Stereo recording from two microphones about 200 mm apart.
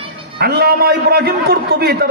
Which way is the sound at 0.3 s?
50° right (ahead or behind).